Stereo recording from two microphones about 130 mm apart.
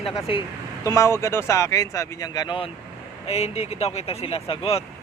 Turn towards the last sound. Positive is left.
turn(degrees=45)  # may be behind; listen again after turning